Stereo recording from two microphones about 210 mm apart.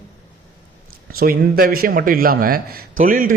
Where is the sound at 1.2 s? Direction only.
45° right (ahead or behind).